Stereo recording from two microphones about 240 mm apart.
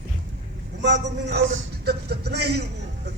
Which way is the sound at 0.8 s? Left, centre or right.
Right.